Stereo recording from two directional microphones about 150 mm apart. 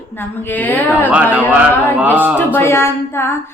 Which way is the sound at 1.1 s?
10° right (ahead or behind).